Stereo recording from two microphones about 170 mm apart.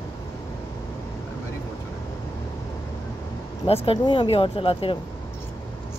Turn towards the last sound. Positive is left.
turn(degrees=30)  # may be behind; listen again after turning